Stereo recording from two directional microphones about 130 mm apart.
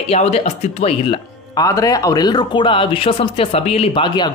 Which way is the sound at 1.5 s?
25° left (ahead or behind).